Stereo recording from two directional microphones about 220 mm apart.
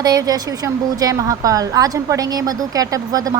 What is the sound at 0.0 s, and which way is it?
A woman's voice, 15° right (ahead or behind).